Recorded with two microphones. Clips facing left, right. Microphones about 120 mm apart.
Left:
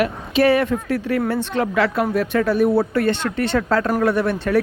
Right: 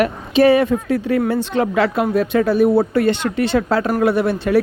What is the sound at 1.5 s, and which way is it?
Speech, 30° right (ahead or behind).